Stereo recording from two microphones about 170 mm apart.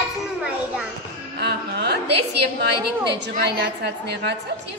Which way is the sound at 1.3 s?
75° right (ahead or behind).